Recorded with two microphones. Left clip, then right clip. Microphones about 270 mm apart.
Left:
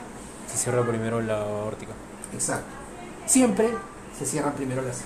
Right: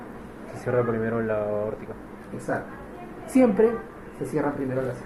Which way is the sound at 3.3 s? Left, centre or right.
Left.